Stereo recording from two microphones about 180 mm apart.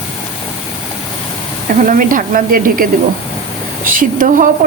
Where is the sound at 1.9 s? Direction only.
50° right (ahead or behind).